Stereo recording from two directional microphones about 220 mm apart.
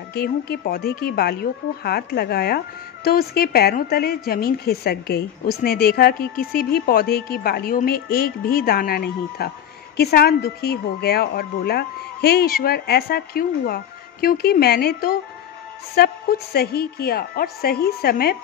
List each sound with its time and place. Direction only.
0.1 s a woman's voice: 45° left (ahead or behind)